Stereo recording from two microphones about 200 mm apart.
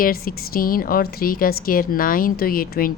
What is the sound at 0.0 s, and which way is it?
A woman's voice, 45° left (ahead or behind).